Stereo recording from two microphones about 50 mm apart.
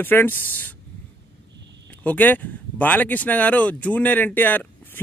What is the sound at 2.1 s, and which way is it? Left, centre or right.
Speech, left.